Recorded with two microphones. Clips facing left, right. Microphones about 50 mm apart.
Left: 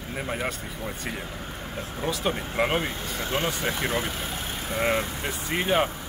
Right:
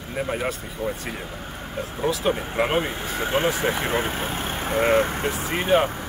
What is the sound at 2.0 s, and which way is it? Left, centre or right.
Speech, centre.